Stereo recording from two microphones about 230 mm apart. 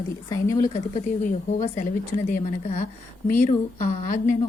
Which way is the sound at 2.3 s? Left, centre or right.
Left.